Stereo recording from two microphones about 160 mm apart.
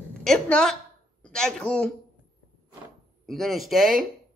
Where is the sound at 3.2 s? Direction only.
Centre (ahead or behind).